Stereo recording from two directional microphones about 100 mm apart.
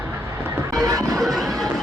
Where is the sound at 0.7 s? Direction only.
35° right (ahead or behind).